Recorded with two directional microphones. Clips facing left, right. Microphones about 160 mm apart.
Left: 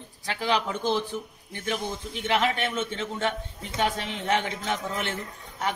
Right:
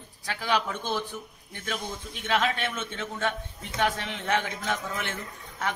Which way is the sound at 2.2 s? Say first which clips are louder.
Left 2 dB; 20° left (ahead or behind).